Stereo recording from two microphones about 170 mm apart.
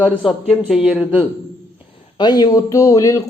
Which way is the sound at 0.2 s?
Centre (ahead or behind).